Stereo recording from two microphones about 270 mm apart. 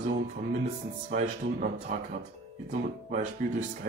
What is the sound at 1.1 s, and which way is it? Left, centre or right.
Speech, right.